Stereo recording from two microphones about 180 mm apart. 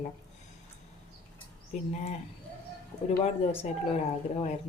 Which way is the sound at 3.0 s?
35° left (ahead or behind).